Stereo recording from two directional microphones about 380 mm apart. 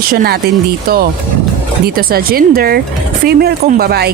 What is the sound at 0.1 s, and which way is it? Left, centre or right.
Speech, right.